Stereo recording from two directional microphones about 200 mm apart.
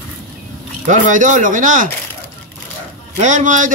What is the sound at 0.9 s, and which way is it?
Speech, 40° right (ahead or behind).